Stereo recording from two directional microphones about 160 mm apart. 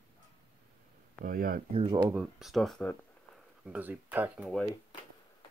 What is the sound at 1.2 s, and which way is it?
Speech, 65° right (ahead or behind).